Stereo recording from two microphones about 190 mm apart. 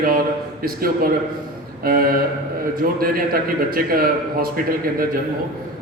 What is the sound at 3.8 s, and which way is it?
A man's voice, 50° right (ahead or behind).